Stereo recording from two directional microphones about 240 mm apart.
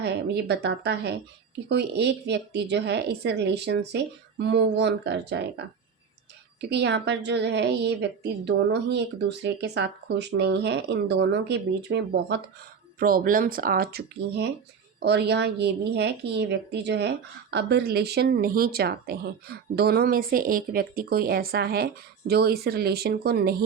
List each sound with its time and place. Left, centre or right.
0.0 s a woman's voice: right